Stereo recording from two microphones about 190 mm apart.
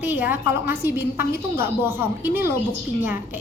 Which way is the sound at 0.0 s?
10° right (ahead or behind).